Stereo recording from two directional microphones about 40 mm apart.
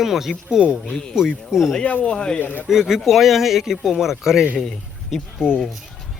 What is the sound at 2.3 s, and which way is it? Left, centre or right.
Speech, left.